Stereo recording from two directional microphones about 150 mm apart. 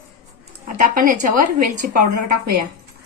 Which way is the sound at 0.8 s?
65° right (ahead or behind).